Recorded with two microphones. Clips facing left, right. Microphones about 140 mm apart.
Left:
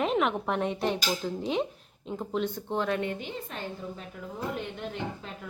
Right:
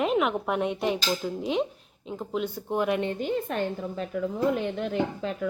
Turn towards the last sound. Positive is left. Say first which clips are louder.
# right 8 dB
turn(degrees=-90)